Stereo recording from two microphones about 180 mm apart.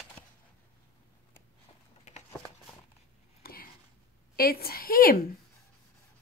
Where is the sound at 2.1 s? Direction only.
40° left (ahead or behind).